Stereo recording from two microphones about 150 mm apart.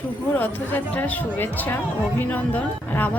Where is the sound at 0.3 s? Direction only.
15° left (ahead or behind).